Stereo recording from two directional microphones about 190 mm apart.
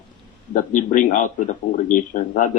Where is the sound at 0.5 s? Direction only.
45° left (ahead or behind).